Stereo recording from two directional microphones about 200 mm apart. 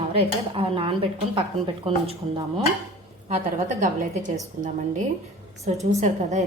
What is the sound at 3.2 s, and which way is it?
A woman's voice, 35° right (ahead or behind).